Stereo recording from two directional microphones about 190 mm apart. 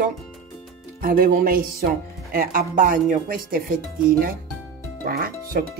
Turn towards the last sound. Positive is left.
turn(degrees=-50)  # may be behind; listen again after turning